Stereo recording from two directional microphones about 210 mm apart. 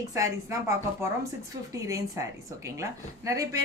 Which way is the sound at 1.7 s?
15° right (ahead or behind).